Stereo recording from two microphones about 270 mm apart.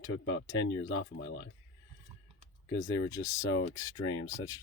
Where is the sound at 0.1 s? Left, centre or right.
Left.